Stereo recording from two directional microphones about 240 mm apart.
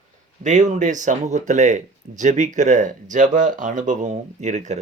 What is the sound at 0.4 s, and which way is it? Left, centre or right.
Speech, right.